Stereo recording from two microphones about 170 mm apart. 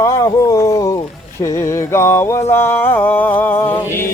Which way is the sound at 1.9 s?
15° left (ahead or behind).